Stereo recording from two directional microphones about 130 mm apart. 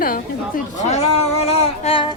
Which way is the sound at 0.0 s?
90° left.